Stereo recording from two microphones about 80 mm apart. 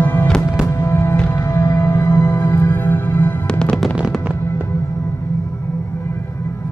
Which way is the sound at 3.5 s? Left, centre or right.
Centre.